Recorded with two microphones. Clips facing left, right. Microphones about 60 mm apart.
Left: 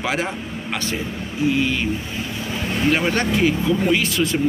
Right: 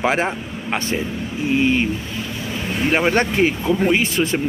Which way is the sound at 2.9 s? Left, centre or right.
Right.